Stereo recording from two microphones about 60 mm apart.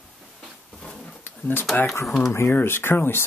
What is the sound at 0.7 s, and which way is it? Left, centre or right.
Dog, centre.